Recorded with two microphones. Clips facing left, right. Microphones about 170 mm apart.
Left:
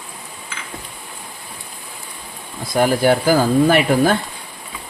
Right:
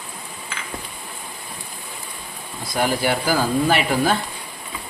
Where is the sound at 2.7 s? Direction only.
45° left (ahead or behind).